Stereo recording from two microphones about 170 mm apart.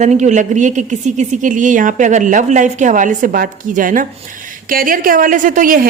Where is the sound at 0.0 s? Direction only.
45° right (ahead or behind).